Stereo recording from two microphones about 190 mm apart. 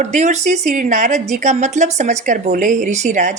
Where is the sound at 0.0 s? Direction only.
35° right (ahead or behind).